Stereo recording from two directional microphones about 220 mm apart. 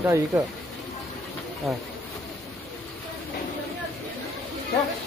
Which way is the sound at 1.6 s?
Centre (ahead or behind).